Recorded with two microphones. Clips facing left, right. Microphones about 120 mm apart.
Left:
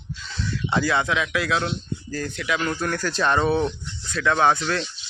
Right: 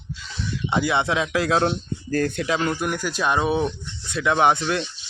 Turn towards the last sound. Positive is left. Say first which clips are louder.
# right 1 dB
turn(degrees=-25)  # may be behind; listen again after turning